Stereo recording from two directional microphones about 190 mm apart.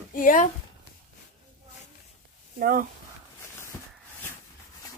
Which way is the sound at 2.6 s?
45° right (ahead or behind).